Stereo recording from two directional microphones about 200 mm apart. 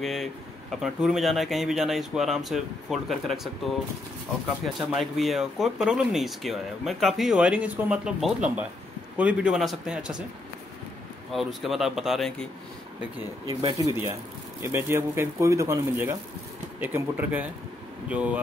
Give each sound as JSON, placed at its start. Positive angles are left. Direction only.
{"t": 0.0, "sound": "speech", "side_deg": 0}
{"t": 4.7, "sound": "speech", "side_deg": 0}
{"t": 11.3, "sound": "speech", "side_deg": 0}
{"t": 13.5, "sound": "speech", "side_deg": -20}